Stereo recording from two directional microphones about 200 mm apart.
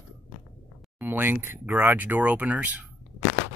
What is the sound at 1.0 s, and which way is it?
Speech, 10° right (ahead or behind).